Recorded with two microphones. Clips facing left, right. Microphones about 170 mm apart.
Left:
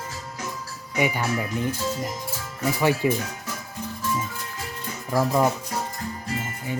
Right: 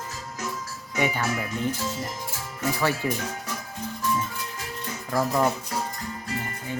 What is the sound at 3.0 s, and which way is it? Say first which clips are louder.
Speech: left 5 dB; 15° left (ahead or behind).